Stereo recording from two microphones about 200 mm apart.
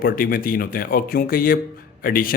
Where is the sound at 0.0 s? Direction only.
45° left (ahead or behind).